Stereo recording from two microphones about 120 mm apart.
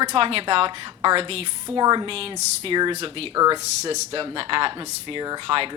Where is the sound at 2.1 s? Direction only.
50° right (ahead or behind).